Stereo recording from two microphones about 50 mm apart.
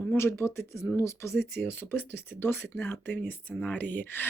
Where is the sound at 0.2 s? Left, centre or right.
Left.